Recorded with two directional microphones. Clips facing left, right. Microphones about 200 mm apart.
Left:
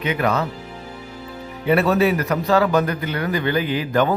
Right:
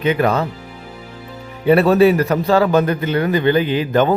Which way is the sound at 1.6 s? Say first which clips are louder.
Right 6 dB; 30° right (ahead or behind).